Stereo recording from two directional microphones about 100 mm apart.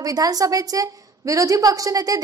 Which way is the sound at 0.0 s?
40° right (ahead or behind).